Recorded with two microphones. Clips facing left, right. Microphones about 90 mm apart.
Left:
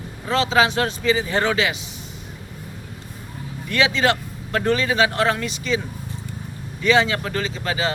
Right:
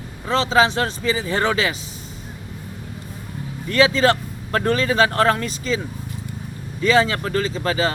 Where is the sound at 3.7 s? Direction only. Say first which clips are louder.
Right 3 dB; 35° right (ahead or behind).